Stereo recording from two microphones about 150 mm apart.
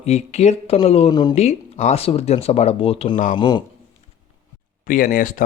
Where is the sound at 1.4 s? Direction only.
50° left (ahead or behind).